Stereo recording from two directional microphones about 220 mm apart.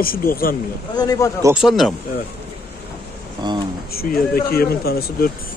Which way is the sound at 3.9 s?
45° left (ahead or behind).